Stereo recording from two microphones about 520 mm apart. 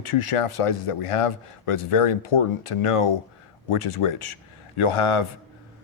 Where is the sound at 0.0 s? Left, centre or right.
Left.